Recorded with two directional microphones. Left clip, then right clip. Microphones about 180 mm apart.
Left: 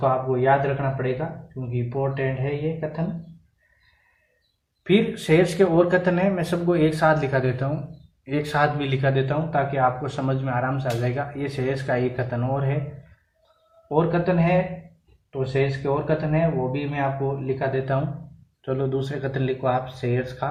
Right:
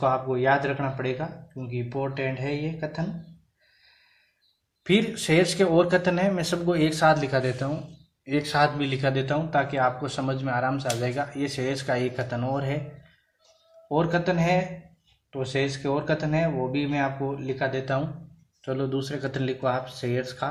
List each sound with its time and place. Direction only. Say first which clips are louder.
0.0 s speech: left 2 dB; 40° right (ahead or behind)
4.8 s speech: left 3 dB; 35° right (ahead or behind)
13.8 s speech: left 2 dB; 40° right (ahead or behind)